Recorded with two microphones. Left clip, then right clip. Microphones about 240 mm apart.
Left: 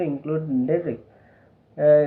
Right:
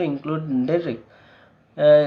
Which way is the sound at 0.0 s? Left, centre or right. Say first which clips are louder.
Right 1 dB; right.